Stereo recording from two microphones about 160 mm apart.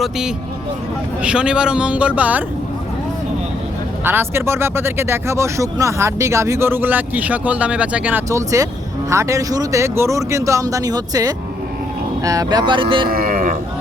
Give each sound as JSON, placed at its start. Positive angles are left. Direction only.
{"t": 0.0, "sound": "speech", "side_deg": -5}
{"t": 4.0, "sound": "speech", "side_deg": -15}
{"t": 13.1, "sound": "a sound", "side_deg": -65}